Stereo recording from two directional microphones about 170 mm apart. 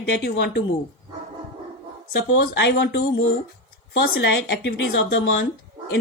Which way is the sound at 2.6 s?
75° left (ahead or behind).